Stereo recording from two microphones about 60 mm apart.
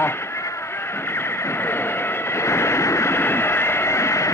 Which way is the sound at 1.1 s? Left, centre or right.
Left.